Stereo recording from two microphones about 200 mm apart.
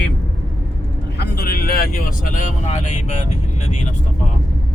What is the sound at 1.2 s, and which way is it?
Speech, 50° left (ahead or behind).